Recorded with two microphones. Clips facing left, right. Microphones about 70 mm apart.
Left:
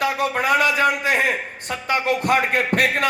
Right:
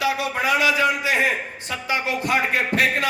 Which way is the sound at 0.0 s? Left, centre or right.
Left.